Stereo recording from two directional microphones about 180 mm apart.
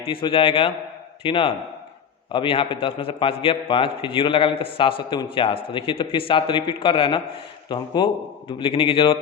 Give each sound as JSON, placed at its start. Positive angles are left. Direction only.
{"t": 0.0, "sound": "a man's voice", "side_deg": 30}